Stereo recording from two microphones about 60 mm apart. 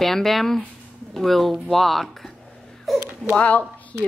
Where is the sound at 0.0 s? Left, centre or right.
Centre.